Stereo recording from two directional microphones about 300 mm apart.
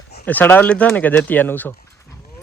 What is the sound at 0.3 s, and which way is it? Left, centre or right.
Speech, centre.